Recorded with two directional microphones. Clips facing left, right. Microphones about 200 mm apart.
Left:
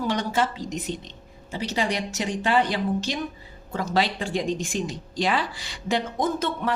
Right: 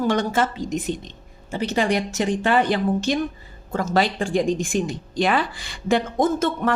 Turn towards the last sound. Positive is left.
turn(degrees=-50)  # may be behind; listen again after turning